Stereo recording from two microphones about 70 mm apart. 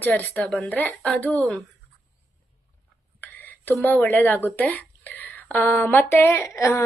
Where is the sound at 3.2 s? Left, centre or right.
Left.